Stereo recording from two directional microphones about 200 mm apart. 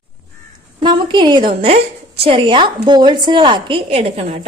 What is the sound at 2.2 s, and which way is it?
A woman's voice, 25° right (ahead or behind).